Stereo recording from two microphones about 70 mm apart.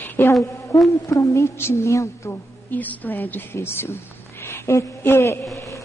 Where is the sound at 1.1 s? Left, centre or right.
Left.